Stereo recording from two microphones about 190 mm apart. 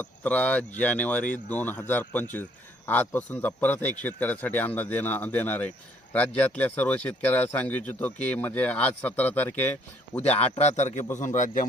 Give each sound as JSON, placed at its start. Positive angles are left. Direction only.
{"t": 0.0, "sound": "speech", "side_deg": 10}
{"t": 10.2, "sound": "a man's voice", "side_deg": 35}